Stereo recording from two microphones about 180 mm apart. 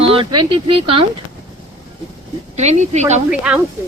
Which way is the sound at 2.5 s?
40° right (ahead or behind).